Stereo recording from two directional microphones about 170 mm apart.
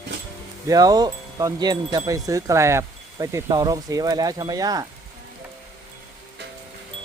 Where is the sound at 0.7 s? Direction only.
20° right (ahead or behind).